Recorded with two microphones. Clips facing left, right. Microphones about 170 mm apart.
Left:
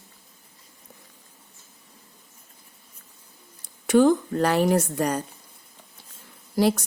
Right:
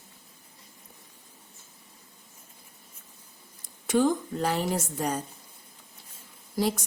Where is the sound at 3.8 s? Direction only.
70° left (ahead or behind).